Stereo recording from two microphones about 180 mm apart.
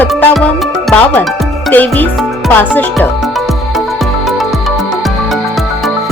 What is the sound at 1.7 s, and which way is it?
Speech, 10° left (ahead or behind).